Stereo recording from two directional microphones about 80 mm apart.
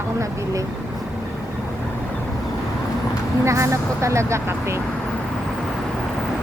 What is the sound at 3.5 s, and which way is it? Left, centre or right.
Speech, right.